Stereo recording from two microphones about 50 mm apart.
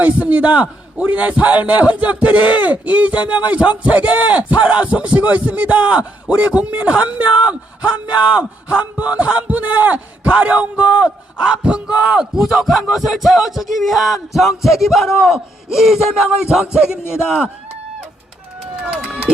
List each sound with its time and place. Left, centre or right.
0.0 s a man's voice: right